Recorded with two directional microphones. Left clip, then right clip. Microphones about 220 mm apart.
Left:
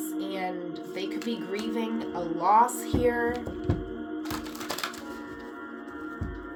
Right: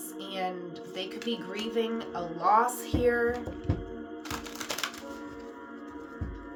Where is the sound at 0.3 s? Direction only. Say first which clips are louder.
Right 2 dB; 15° right (ahead or behind).